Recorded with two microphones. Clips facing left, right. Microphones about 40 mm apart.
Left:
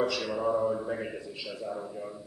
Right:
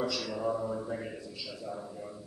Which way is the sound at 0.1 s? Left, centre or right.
Left.